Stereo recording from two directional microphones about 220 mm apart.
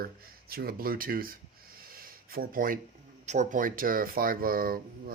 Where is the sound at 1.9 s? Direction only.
40° right (ahead or behind).